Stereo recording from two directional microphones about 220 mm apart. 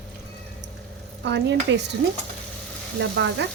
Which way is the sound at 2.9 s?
55° right (ahead or behind).